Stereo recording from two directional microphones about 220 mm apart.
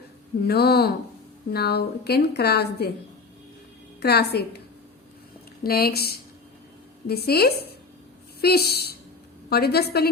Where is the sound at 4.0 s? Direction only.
45° left (ahead or behind).